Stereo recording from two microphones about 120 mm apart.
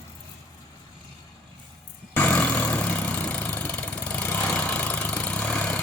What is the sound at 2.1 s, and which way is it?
Vehicle, 15° left (ahead or behind).